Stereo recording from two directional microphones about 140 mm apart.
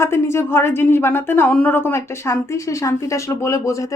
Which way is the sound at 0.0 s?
20° left (ahead or behind).